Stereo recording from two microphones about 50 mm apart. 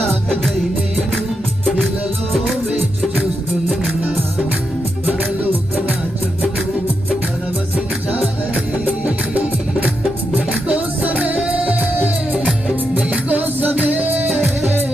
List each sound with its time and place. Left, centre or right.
0.0 s music: centre
8.5 s music: right
13.2 s music: right